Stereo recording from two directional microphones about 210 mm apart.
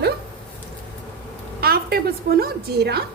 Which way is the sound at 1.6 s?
45° right (ahead or behind).